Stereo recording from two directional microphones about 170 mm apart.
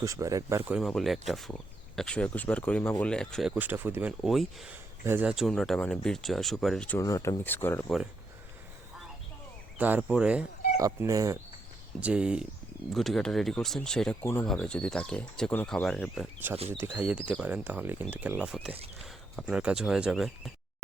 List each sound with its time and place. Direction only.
0.0 s speech: 20° right (ahead or behind)
0.8 s speech: centre (ahead or behind)
4.2 s speech: centre (ahead or behind)
7.0 s speech: 20° left (ahead or behind)
9.7 s speech: 10° right (ahead or behind)
10.8 s speech: 20° right (ahead or behind)
11.9 s speech: 5° right (ahead or behind)
16.7 s speech: 10° right (ahead or behind)